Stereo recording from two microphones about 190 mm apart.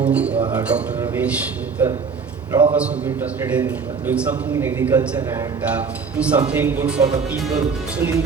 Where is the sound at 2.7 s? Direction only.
5° right (ahead or behind).